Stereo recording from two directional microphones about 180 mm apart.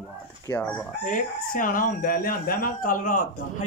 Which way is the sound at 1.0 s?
50° left (ahead or behind).